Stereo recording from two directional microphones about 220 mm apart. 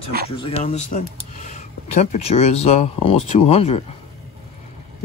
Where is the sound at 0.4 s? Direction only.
25° left (ahead or behind).